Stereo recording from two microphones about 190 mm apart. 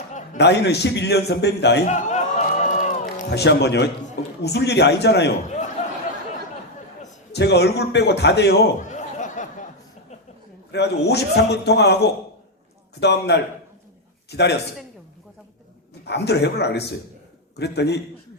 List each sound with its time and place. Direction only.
0.3 s a man's voice: 60° left (ahead or behind)
1.9 s music: 40° left (ahead or behind)
3.2 s a man's voice: 60° left (ahead or behind)
7.3 s a man's voice: 60° left (ahead or behind)
8.8 s a sound: 40° left (ahead or behind)
10.7 s a man's voice: 60° left (ahead or behind)
13.0 s a man's voice: 60° left (ahead or behind)
16.0 s a man's voice: 60° left (ahead or behind)